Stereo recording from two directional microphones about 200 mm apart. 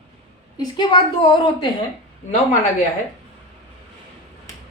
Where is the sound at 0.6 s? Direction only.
20° left (ahead or behind).